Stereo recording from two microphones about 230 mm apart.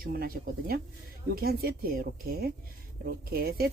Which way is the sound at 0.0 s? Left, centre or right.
Right.